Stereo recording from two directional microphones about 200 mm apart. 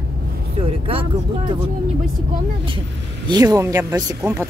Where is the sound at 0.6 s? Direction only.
30° right (ahead or behind).